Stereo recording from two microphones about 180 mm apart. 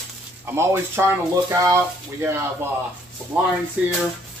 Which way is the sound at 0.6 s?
15° right (ahead or behind).